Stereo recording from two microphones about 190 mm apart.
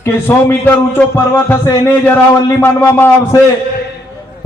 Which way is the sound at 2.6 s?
15° left (ahead or behind).